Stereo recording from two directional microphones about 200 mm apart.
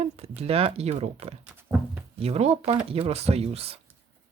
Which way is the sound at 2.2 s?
30° right (ahead or behind).